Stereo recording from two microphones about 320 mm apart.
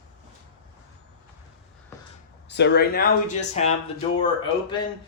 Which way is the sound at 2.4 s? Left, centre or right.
Left.